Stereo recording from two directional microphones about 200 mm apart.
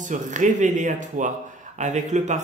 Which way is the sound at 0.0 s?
40° right (ahead or behind).